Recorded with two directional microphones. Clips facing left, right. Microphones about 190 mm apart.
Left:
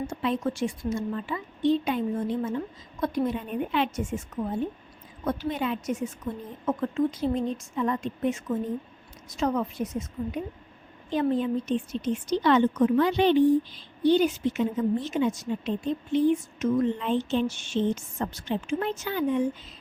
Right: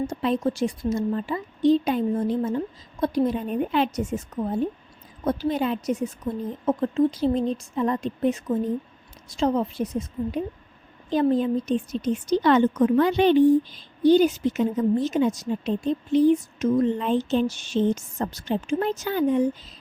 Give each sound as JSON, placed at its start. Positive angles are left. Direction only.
{"t": 0.1, "sound": "a woman's voice", "side_deg": -35}
{"t": 5.2, "sound": "a woman's voice", "side_deg": -35}